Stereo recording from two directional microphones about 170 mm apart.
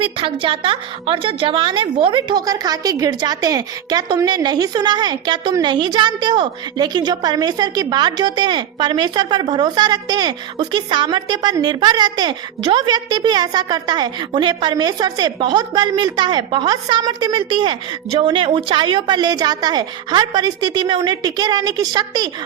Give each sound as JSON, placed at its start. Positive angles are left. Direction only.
{"t": 0.0, "sound": "a woman's voice", "side_deg": -30}